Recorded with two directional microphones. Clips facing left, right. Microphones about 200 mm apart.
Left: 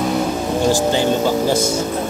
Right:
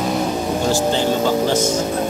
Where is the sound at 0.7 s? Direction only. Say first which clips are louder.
Left 1 dB; 15° left (ahead or behind).